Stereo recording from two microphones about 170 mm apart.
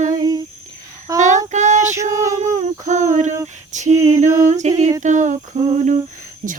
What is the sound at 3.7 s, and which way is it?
Female singing, 45° right (ahead or behind).